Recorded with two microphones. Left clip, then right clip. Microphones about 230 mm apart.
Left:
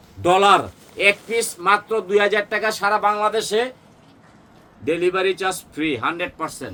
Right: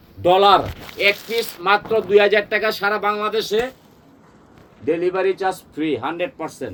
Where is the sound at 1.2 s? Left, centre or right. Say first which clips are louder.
Even; centre.